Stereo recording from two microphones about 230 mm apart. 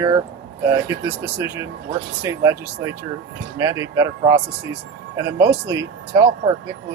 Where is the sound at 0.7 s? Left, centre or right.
Centre.